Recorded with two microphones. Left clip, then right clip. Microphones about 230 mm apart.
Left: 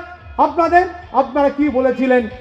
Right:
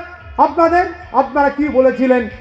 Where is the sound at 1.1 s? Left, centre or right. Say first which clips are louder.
Right 2 dB; right.